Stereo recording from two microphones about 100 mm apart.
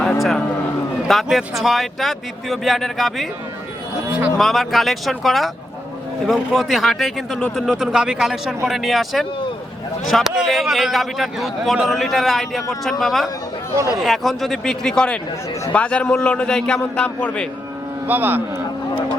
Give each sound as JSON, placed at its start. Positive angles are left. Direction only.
{"t": 0.0, "sound": "a sound", "side_deg": 0}
{"t": 1.0, "sound": "a man's voice", "side_deg": 0}
{"t": 4.4, "sound": "a man's voice", "side_deg": 0}
{"t": 18.0, "sound": "speech", "side_deg": -20}